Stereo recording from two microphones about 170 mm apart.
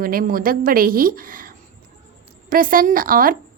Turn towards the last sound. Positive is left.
turn(degrees=-55)  # may be behind; listen again after turning